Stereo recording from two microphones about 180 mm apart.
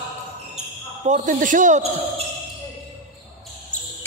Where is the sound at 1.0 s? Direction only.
45° right (ahead or behind).